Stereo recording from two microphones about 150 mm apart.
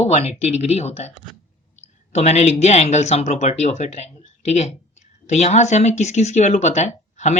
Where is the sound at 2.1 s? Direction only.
50° left (ahead or behind).